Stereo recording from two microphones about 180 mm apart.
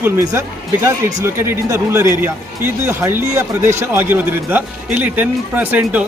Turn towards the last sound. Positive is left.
turn(degrees=-10)  # may be behind; listen again after turning